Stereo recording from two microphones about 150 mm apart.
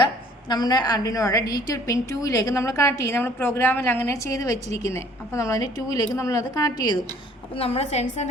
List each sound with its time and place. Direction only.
0.0 s a woman's voice: 30° left (ahead or behind)
7.6 s a woman's voice: 45° left (ahead or behind)